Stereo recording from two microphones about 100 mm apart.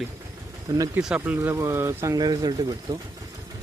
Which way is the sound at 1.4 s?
30° right (ahead or behind).